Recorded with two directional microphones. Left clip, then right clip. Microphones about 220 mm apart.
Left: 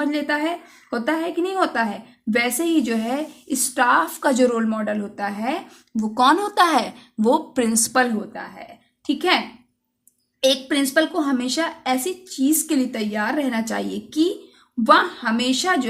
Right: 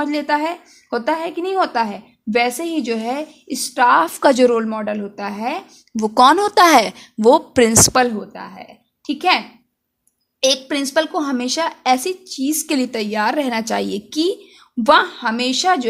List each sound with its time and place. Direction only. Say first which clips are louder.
0.0 s a woman's voice: right 3 dB; 40° right (ahead or behind)
10.4 s a woman's voice: right 1 dB; 40° right (ahead or behind)